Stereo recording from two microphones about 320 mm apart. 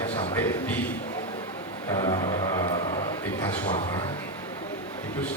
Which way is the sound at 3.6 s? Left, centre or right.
Centre.